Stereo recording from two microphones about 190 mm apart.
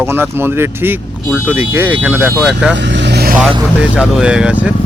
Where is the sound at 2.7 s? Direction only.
70° right (ahead or behind).